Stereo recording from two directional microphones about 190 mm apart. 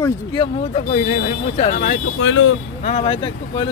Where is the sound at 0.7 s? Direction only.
40° left (ahead or behind).